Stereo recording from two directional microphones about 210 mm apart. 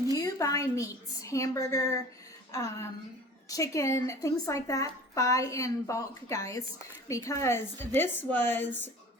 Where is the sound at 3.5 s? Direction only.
15° left (ahead or behind).